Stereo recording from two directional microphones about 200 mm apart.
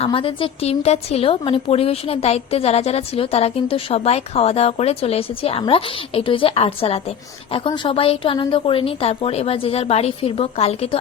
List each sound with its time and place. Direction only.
0.0 s a woman's voice: 25° left (ahead or behind)